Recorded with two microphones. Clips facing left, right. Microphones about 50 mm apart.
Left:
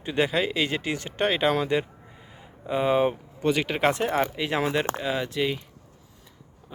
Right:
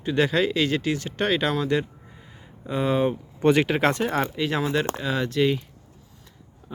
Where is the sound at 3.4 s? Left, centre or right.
Right.